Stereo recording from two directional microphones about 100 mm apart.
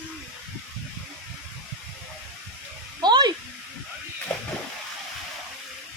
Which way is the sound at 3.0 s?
45° right (ahead or behind).